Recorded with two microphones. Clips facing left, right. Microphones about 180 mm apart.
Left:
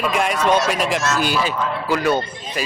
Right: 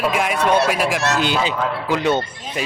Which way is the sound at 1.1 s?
20° right (ahead or behind).